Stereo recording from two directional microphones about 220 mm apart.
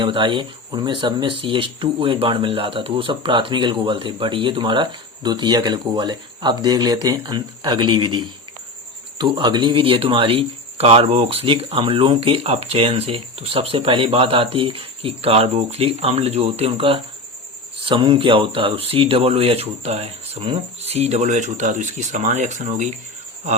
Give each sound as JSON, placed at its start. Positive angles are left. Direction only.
{"t": 0.0, "sound": "speech", "side_deg": -25}